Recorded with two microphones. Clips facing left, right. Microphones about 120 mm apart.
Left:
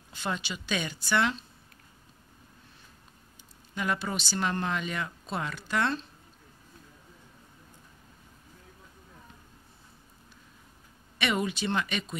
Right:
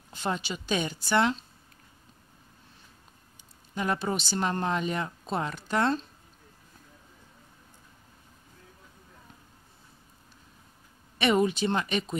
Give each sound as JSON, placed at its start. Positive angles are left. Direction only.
{"t": 0.1, "sound": "speech", "side_deg": -35}
{"t": 3.7, "sound": "speech", "side_deg": -30}
{"t": 11.1, "sound": "speech", "side_deg": -35}